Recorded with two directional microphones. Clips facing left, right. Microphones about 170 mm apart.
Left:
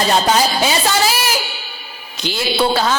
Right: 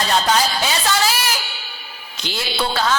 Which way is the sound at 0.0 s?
10° left (ahead or behind).